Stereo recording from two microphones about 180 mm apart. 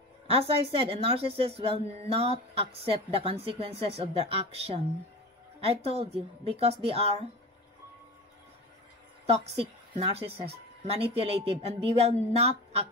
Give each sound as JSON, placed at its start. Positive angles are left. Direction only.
{"t": 0.3, "sound": "a woman's voice", "side_deg": -30}
{"t": 5.9, "sound": "a woman's voice", "side_deg": -35}
{"t": 9.2, "sound": "a woman's voice", "side_deg": -35}